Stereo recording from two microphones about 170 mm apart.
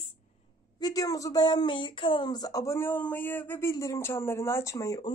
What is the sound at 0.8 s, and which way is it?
Speech, 20° left (ahead or behind).